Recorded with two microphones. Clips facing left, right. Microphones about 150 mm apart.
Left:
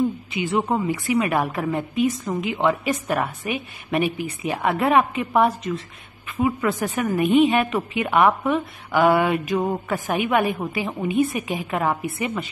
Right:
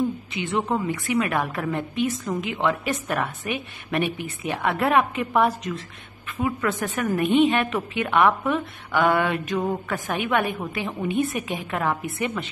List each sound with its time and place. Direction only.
0.3 s a woman's voice: 5° left (ahead or behind)
10.1 s a woman's voice: 5° left (ahead or behind)